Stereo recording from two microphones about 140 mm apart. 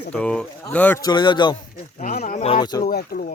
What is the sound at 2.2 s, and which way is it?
Speech, 50° left (ahead or behind).